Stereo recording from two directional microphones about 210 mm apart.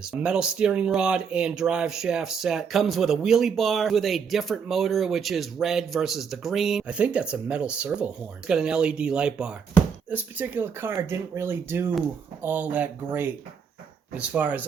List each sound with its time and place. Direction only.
0.0 s speech: 5° right (ahead or behind)